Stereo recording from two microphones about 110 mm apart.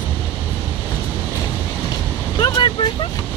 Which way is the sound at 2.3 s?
45° left (ahead or behind).